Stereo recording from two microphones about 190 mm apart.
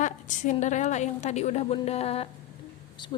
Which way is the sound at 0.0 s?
40° left (ahead or behind).